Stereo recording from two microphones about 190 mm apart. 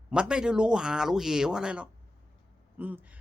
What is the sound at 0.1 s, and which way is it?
A woman's voice, 5° right (ahead or behind).